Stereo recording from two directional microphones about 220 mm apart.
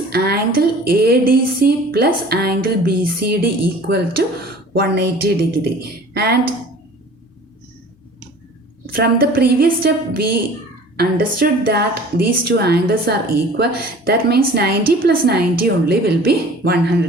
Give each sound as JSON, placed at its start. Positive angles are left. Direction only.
{"t": 0.1, "sound": "a woman's voice", "side_deg": -45}
{"t": 8.9, "sound": "a woman's voice", "side_deg": -40}